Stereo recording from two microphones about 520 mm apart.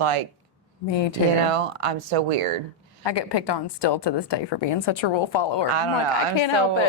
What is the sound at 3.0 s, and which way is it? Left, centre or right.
A woman's voice, left.